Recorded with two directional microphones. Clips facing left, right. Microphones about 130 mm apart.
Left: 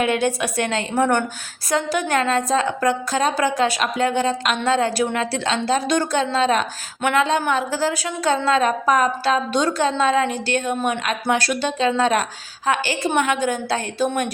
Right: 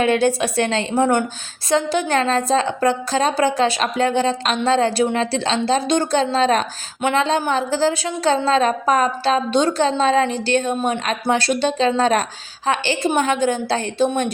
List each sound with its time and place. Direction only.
0.0 s a woman's voice: 30° right (ahead or behind)